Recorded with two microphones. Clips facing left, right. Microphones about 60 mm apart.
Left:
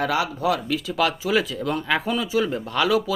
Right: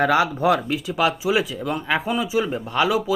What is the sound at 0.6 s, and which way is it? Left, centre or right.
Speech, right.